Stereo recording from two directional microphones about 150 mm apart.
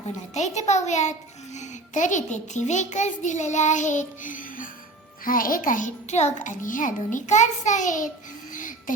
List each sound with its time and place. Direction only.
0.3 s a child's voice: 50° left (ahead or behind)
8.5 s music: 60° left (ahead or behind)